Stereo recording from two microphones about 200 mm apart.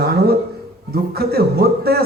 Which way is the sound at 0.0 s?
50° right (ahead or behind).